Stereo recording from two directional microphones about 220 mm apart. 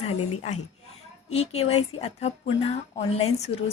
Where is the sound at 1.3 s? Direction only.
30° left (ahead or behind).